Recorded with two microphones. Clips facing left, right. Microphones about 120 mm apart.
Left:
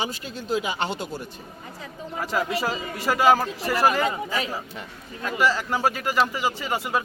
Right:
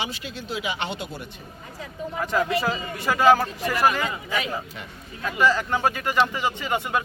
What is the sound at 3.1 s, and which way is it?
Speech, 10° left (ahead or behind).